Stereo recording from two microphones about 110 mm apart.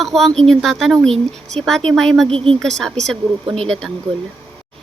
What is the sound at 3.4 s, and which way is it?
Speech, 60° right (ahead or behind).